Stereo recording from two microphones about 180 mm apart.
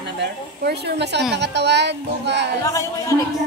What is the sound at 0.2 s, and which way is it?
A woman's voice, 65° right (ahead or behind).